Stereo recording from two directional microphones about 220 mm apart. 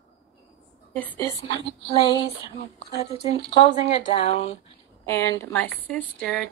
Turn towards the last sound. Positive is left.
turn(degrees=5)  # may be behind; listen again after turning